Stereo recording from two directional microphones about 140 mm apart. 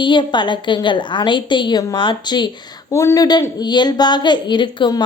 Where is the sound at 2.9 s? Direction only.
20° left (ahead or behind).